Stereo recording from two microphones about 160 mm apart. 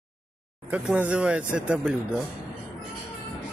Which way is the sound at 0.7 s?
10° right (ahead or behind).